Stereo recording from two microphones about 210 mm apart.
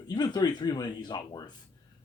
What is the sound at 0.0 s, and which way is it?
Speech, 20° left (ahead or behind).